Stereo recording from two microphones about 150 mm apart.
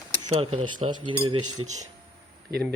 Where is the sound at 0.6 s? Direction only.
30° right (ahead or behind).